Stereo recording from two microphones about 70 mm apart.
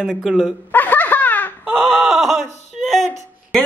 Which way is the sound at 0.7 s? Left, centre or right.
Left.